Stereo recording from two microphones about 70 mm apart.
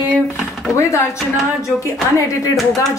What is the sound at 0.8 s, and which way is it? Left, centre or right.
Speech, left.